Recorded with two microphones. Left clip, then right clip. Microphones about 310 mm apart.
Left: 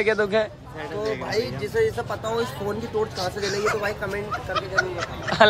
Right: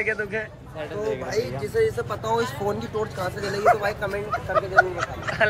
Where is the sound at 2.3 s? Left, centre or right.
Centre.